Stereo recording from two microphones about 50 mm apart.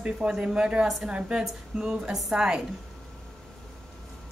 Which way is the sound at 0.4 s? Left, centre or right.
Centre.